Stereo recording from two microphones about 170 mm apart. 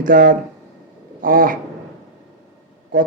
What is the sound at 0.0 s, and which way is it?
A man's voice, 55° right (ahead or behind).